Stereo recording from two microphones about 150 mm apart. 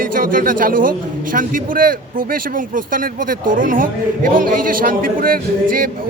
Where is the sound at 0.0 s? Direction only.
70° right (ahead or behind).